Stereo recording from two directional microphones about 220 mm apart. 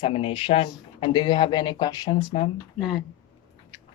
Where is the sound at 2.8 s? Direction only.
Centre (ahead or behind).